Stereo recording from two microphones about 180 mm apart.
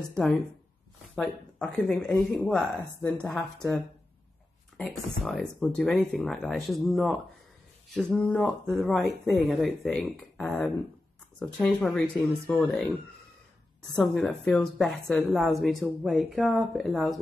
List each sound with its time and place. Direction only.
0.1 s a woman's voice: 10° left (ahead or behind)
5.2 s a woman's voice: centre (ahead or behind)
13.9 s a woman's voice: 5° left (ahead or behind)